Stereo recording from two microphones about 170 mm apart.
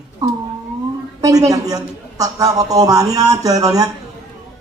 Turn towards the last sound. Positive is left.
turn(degrees=-20)  # may be behind; listen again after turning